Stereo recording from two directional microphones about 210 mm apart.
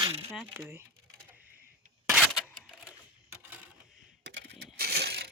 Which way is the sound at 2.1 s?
Centre (ahead or behind).